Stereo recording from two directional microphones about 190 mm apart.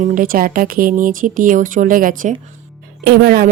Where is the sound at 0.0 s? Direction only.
45° right (ahead or behind).